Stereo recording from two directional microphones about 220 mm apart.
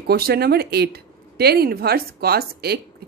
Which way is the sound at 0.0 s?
45° right (ahead or behind).